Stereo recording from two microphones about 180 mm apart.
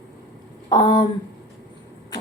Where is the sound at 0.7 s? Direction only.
25° left (ahead or behind).